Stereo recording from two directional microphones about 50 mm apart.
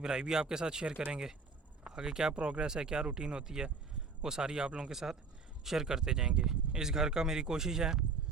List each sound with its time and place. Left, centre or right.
0.0 s speech: centre
0.9 s speech: right
1.9 s speech: centre
4.9 s speech: centre